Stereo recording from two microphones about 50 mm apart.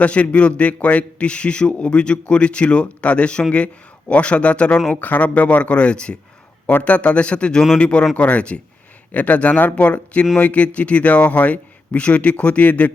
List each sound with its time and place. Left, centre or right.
0.0 s a man's voice: left